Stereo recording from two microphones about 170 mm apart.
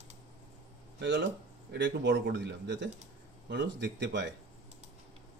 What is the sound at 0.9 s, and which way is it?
A man's voice, 90° right.